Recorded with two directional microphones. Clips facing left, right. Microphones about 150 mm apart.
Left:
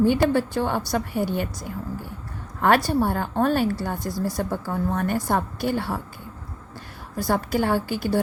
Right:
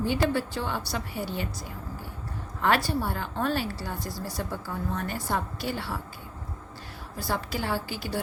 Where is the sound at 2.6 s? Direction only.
50° left (ahead or behind).